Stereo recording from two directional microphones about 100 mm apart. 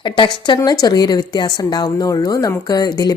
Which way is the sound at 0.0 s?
50° left (ahead or behind).